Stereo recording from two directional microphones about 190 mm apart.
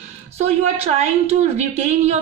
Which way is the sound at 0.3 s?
35° right (ahead or behind).